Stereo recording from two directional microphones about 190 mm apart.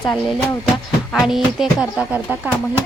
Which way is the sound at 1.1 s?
Centre (ahead or behind).